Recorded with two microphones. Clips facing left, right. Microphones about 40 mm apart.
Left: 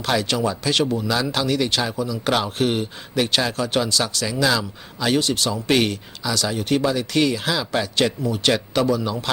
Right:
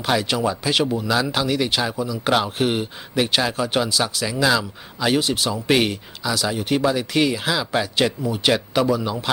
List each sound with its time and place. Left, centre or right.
0.0 s speech: centre